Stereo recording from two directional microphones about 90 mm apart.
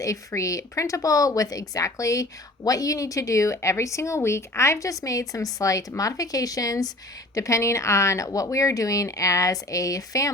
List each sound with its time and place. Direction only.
0.0 s speech: 35° left (ahead or behind)